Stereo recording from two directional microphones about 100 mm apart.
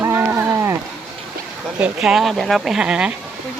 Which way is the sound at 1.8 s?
5° right (ahead or behind).